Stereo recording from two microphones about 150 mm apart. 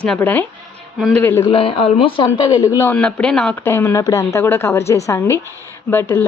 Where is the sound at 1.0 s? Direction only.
Centre (ahead or behind).